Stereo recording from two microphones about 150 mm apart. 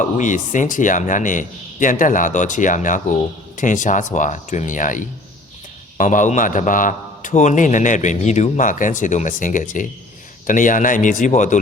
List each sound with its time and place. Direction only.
0.0 s a man's voice: 55° left (ahead or behind)